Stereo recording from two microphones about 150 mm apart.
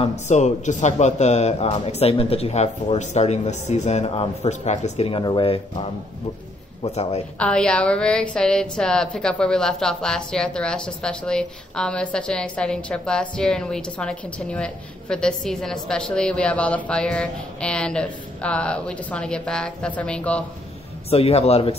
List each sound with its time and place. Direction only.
0.3 s speech: 55° left (ahead or behind)
7.3 s a woman's voice: 5° left (ahead or behind)
21.1 s speech: 40° left (ahead or behind)